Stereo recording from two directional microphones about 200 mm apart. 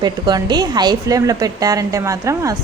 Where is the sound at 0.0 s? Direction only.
20° right (ahead or behind).